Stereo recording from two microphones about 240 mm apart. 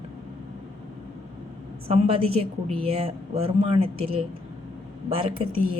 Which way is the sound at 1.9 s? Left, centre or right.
Right.